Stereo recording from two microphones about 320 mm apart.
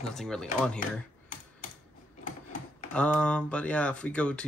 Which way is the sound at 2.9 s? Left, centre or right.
Centre.